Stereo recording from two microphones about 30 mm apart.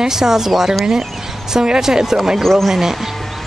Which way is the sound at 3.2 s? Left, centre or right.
Centre.